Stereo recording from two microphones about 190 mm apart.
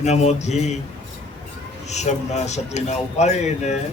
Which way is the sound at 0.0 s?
35° left (ahead or behind).